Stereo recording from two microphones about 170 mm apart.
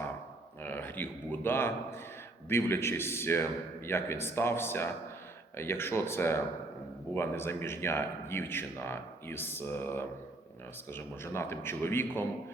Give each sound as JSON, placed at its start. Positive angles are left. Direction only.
{"t": 0.6, "sound": "speech", "side_deg": 10}